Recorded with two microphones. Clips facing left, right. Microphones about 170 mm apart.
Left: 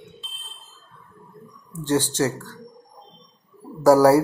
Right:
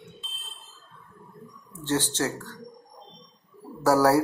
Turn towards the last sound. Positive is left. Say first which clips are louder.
# left 6 dB
turn(degrees=10)  # may be behind; listen again after turning